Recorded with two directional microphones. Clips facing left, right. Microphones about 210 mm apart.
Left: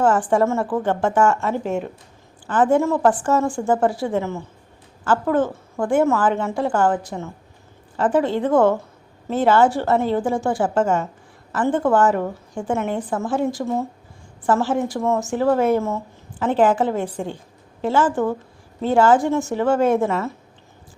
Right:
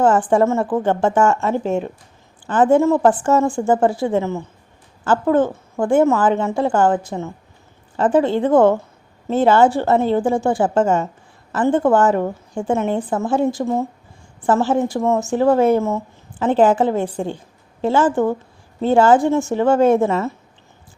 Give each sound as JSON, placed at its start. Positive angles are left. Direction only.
{"t": 0.3, "sound": "a woman's voice", "side_deg": -25}
{"t": 14.4, "sound": "a woman's voice", "side_deg": -25}